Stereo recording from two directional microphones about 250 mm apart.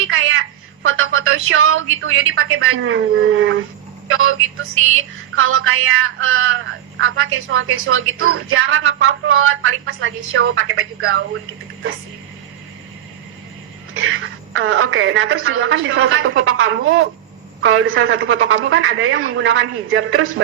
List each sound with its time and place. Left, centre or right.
0.1 s a woman's voice: right
4.1 s a sound: right
13.9 s a woman's voice: right